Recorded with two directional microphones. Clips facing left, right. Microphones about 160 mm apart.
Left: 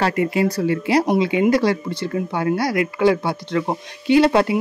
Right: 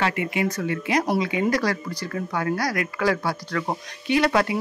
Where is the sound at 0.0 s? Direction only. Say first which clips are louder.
Left 5 dB; 35° left (ahead or behind).